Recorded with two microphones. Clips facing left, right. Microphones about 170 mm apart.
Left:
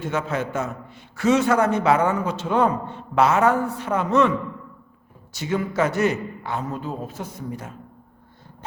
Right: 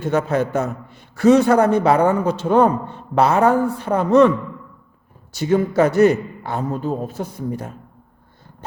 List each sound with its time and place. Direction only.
0.1 s a man's voice: 40° right (ahead or behind)
5.3 s a man's voice: 40° right (ahead or behind)